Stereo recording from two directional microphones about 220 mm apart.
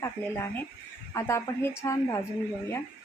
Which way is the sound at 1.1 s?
10° left (ahead or behind).